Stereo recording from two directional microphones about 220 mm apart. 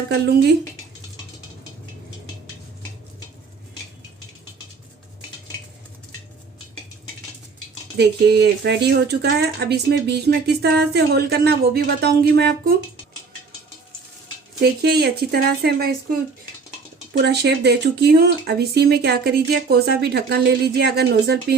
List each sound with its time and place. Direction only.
7.9 s speech: 50° right (ahead or behind)
14.6 s speech: 45° right (ahead or behind)
17.2 s speech: 50° right (ahead or behind)